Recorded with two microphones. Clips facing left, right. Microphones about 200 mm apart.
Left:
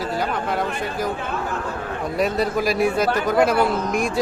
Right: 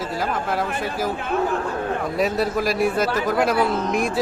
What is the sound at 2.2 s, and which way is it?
A man's voice, centre (ahead or behind).